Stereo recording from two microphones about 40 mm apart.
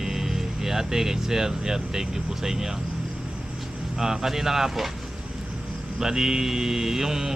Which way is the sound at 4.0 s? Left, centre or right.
Centre.